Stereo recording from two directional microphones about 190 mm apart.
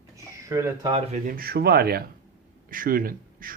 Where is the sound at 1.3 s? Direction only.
50° right (ahead or behind).